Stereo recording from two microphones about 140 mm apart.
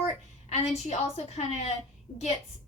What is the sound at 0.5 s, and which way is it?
A woman's voice, 50° left (ahead or behind).